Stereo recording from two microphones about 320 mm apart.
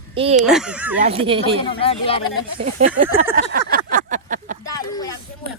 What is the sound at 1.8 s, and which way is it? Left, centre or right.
Speech, centre.